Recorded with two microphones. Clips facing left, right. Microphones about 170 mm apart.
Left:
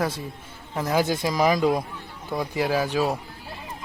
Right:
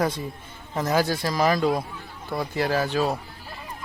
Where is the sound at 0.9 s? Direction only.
20° left (ahead or behind).